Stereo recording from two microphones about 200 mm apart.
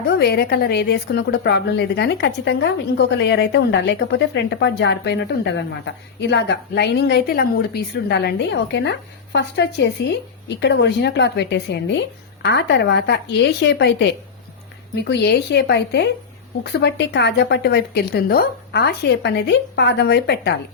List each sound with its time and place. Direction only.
0.1 s a woman's voice: 55° left (ahead or behind)